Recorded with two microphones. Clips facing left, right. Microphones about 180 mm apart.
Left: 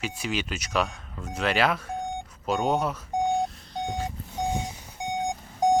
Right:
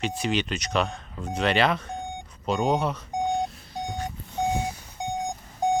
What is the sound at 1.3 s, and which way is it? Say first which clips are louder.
Speech: right 2 dB; 5° left (ahead or behind).